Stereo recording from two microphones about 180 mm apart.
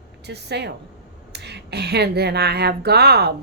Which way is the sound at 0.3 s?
70° right (ahead or behind).